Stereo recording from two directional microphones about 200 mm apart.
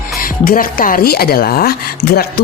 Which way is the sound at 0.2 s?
45° left (ahead or behind).